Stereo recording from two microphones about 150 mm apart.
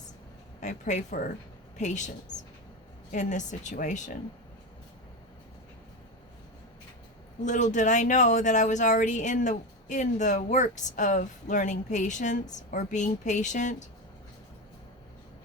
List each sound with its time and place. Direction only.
0.6 s speech: 55° left (ahead or behind)
3.1 s speech: 55° left (ahead or behind)
7.4 s speech: 55° left (ahead or behind)